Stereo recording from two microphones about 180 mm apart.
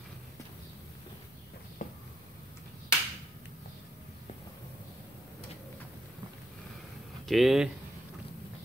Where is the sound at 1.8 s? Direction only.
45° left (ahead or behind).